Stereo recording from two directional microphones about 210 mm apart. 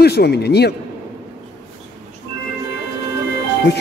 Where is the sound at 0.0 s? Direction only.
50° left (ahead or behind).